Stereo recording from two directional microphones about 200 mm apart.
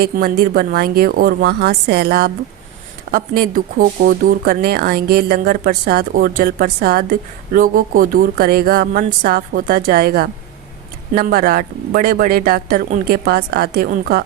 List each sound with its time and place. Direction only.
0.0 s speech: 50° right (ahead or behind)